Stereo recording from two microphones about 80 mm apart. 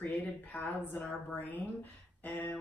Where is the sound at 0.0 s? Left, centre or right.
Left.